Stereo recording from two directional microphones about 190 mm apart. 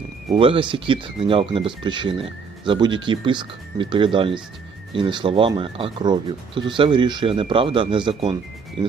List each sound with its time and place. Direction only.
0.3 s speech: 25° right (ahead or behind)